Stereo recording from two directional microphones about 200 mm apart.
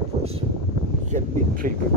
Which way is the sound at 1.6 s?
40° right (ahead or behind).